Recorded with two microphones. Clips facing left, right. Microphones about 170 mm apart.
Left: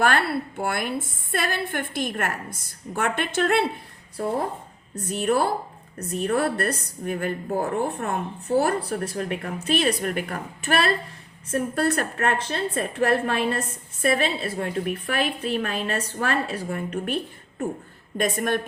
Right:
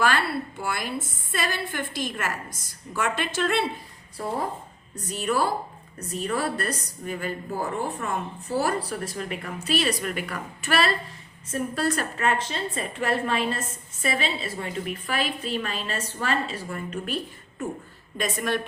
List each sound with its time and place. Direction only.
0.0 s a woman's voice: 55° left (ahead or behind)
5.0 s a woman's voice: 55° left (ahead or behind)
18.2 s a woman's voice: 55° left (ahead or behind)